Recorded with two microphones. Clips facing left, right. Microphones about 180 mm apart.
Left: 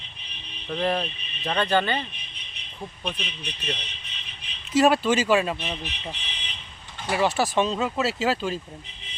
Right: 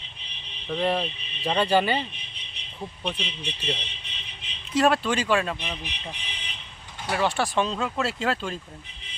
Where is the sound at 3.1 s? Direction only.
30° right (ahead or behind).